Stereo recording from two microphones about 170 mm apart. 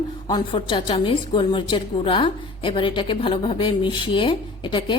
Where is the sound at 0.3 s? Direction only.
25° left (ahead or behind).